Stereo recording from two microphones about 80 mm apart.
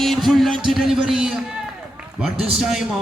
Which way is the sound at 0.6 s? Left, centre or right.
Centre.